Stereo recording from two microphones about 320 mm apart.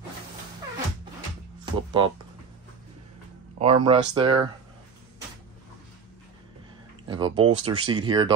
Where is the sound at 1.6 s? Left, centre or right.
Centre.